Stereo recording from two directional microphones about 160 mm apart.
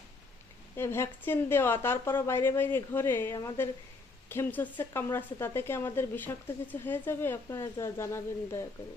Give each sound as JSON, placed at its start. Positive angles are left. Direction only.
{"t": 0.8, "sound": "speech", "side_deg": 15}